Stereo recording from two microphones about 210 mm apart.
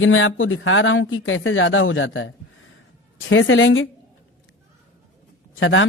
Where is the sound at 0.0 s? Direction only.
70° left (ahead or behind).